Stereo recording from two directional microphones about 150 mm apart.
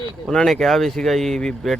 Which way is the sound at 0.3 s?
Centre (ahead or behind).